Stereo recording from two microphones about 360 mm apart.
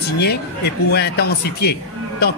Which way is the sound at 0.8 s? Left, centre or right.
Left.